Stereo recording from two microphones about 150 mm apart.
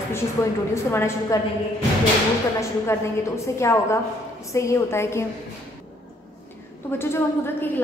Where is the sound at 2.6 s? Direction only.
20° left (ahead or behind).